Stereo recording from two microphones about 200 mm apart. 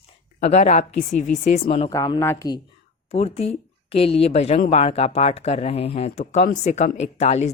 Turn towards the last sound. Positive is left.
turn(degrees=35)  # may be behind; listen again after turning